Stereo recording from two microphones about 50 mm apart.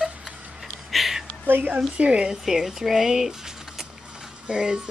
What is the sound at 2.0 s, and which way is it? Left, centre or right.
Speech, right.